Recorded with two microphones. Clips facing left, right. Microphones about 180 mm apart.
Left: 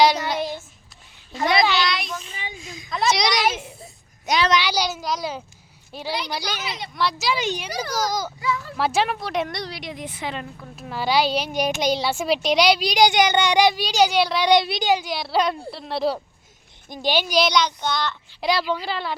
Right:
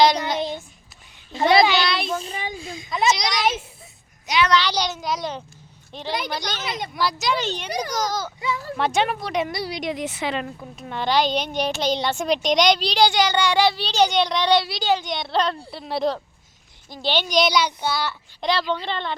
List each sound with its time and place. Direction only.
0.3 s a sound: 20° right (ahead or behind)
1.8 s child singing: 30° right (ahead or behind)
3.1 s a sound: 75° left (ahead or behind)
4.4 s child singing: 15° left (ahead or behind)
4.7 s a child's voice: 5° left (ahead or behind)
8.4 s speech: 25° right (ahead or behind)
8.7 s a child's voice: centre (ahead or behind)
9.9 s a woman's voice: 80° right
10.8 s a child's voice: 5° left (ahead or behind)
16.9 s a child's voice: 15° left (ahead or behind); by 18.2 s 5° right (ahead or behind)
18.3 s a child's voice: 10° left (ahead or behind)